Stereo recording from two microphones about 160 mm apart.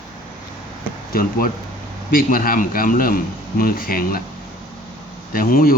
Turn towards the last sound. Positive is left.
turn(degrees=65)  # may be behind; listen again after turning